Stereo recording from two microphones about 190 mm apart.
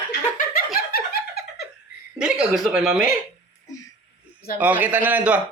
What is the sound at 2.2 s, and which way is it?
Speech, 5° right (ahead or behind).